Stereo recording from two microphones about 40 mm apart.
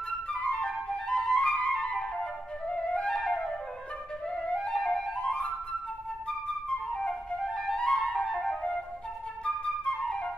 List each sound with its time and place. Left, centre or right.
0.3 s flute: left